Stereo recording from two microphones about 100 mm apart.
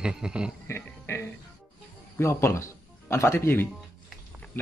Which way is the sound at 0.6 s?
25° left (ahead or behind).